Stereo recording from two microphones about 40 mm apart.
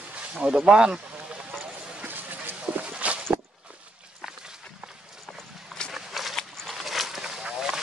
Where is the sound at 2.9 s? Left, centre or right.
Right.